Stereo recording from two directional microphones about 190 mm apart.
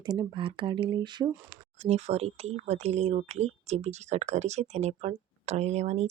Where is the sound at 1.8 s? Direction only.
35° right (ahead or behind).